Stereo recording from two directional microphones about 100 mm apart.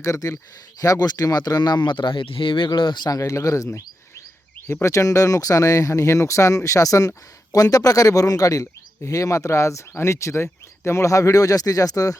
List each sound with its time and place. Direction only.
0.0 s speech: 35° left (ahead or behind)
4.7 s speech: 30° left (ahead or behind)